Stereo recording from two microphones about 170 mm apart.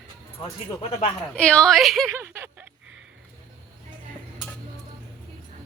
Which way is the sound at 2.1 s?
15° right (ahead or behind).